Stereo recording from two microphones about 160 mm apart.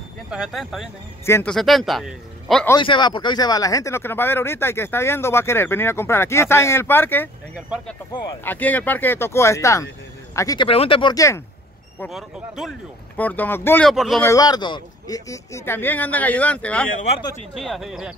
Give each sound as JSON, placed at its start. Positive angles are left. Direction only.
{"t": 0.3, "sound": "speech", "side_deg": -5}
{"t": 1.2, "sound": "speech", "side_deg": 15}
{"t": 1.5, "sound": "speech", "side_deg": 0}
{"t": 2.8, "sound": "speech", "side_deg": 30}
{"t": 7.5, "sound": "speech", "side_deg": 0}
{"t": 10.7, "sound": "speech", "side_deg": 35}
{"t": 12.1, "sound": "speech", "side_deg": 0}
{"t": 13.1, "sound": "speech", "side_deg": 10}
{"t": 13.8, "sound": "speech", "side_deg": 0}
{"t": 14.2, "sound": "speech", "side_deg": 20}